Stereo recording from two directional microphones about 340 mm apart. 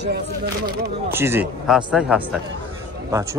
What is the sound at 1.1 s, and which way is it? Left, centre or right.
A man's voice, centre.